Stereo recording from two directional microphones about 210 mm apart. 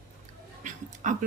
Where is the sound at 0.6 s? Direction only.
35° right (ahead or behind).